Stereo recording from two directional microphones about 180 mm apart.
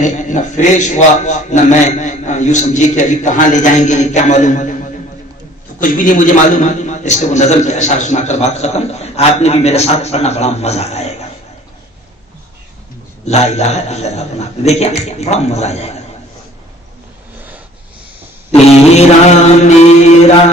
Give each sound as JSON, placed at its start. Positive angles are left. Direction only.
{"t": 0.0, "sound": "a man's voice", "side_deg": 40}
{"t": 6.0, "sound": "a man's voice", "side_deg": 45}
{"t": 13.2, "sound": "a man's voice", "side_deg": 40}
{"t": 18.9, "sound": "a man's voice", "side_deg": 40}